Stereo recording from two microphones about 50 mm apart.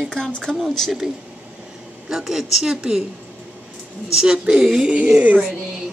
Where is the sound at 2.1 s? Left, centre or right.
Centre.